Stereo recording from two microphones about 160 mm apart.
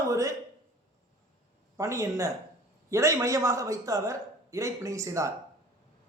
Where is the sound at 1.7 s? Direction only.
20° right (ahead or behind).